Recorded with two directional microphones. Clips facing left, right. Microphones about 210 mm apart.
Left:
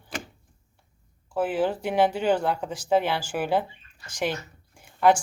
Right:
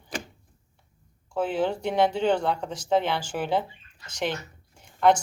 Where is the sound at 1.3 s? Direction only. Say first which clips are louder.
Left 1 dB; 5° left (ahead or behind).